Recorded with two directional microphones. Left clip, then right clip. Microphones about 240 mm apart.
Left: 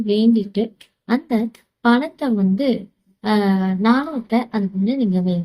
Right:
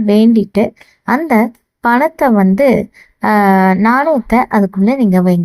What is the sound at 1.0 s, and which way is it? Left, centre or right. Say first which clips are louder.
Speech: right 10 dB; right.